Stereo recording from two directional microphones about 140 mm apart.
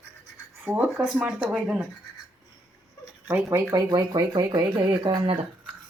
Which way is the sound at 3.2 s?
20° right (ahead or behind).